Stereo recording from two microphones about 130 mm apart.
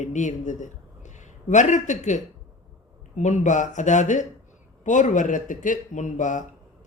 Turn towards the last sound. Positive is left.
turn(degrees=75)  # may be behind; listen again after turning